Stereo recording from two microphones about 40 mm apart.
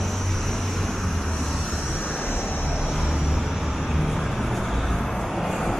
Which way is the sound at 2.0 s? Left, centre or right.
Left.